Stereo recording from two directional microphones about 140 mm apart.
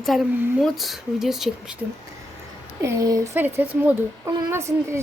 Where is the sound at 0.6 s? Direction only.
Centre (ahead or behind).